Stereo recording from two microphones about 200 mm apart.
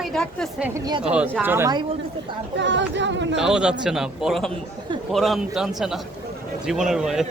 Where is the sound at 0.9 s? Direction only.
25° right (ahead or behind).